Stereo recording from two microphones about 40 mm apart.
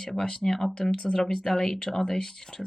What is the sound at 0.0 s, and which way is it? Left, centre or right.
Speech, centre.